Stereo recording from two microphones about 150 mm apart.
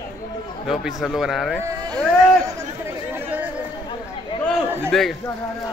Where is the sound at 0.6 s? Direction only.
Centre (ahead or behind).